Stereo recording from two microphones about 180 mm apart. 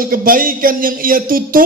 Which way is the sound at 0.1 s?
50° right (ahead or behind).